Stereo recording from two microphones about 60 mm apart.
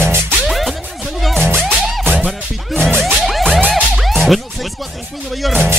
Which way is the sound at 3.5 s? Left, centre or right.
Right.